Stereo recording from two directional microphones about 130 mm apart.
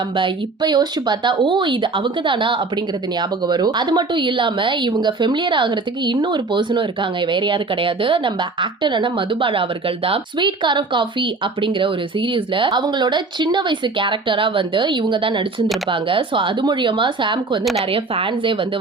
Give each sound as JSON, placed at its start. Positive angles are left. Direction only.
{"t": 0.2, "sound": "a woman's voice", "side_deg": -35}